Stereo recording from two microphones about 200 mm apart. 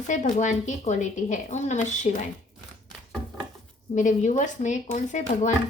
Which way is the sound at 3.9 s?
40° left (ahead or behind).